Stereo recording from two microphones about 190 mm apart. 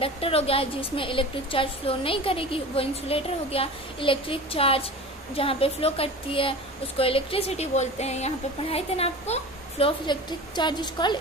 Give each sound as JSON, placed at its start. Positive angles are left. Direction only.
{"t": 0.0, "sound": "a woman's voice", "side_deg": 30}